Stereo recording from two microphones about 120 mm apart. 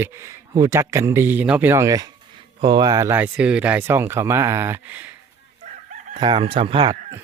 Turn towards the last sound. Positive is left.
turn(degrees=-50)  # may be behind; listen again after turning